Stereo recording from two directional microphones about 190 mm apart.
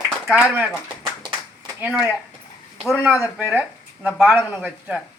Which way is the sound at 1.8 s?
5° right (ahead or behind).